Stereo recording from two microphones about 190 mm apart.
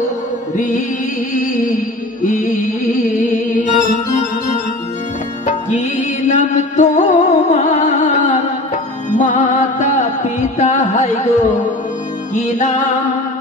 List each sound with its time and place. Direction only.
0.6 s music: 40° left (ahead or behind)
5.7 s music: 40° left (ahead or behind)